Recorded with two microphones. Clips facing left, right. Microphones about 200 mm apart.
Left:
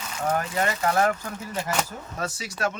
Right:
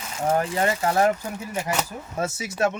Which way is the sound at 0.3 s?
25° right (ahead or behind).